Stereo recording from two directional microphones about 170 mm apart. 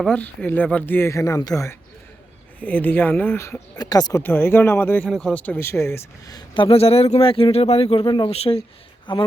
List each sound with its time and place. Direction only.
0.0 s speech: 5° left (ahead or behind)
2.6 s speech: 10° left (ahead or behind)
4.2 s speech: 10° left (ahead or behind)
5.0 s speech: 5° left (ahead or behind); by 9.2 s 25° left (ahead or behind)